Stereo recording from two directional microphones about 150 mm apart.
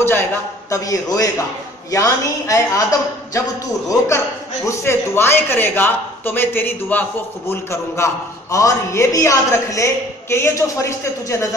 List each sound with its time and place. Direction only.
0.0 s a woman's voice: 15° left (ahead or behind)
4.6 s a man's voice: 15° left (ahead or behind)